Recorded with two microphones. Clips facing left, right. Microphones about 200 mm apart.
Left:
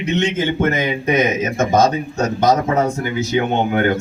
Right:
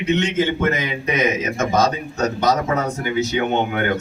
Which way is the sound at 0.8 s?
45° left (ahead or behind).